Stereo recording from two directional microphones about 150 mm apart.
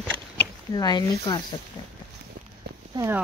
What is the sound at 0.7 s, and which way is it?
Speech, 30° left (ahead or behind).